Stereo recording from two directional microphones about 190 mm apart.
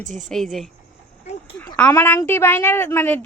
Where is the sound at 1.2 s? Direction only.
35° left (ahead or behind).